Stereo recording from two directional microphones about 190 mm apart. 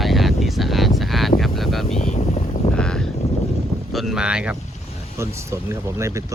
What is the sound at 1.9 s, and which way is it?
Boat, 40° left (ahead or behind).